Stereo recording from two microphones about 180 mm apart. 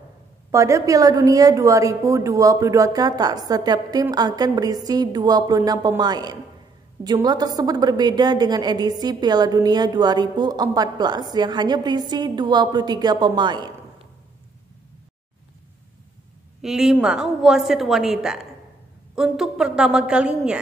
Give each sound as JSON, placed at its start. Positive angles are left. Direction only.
{"t": 0.5, "sound": "a woman's voice", "side_deg": -15}
{"t": 16.6, "sound": "a woman's voice", "side_deg": -5}